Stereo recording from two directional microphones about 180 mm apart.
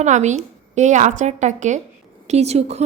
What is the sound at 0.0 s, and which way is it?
Speech, 40° right (ahead or behind).